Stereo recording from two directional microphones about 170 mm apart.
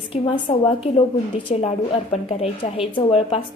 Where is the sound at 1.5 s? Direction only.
40° left (ahead or behind).